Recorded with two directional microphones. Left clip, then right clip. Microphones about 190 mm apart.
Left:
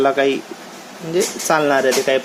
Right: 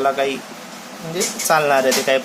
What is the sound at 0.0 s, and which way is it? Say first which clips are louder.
Speech: left 3 dB; 35° left (ahead or behind).